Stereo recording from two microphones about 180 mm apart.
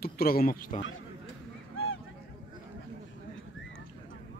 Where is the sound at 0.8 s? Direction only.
90° left.